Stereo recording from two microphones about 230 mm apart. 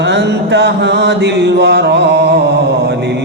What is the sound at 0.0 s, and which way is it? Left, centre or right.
Mantra, right.